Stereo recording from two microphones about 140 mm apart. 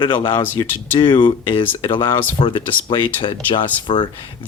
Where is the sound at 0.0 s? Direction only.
35° left (ahead or behind).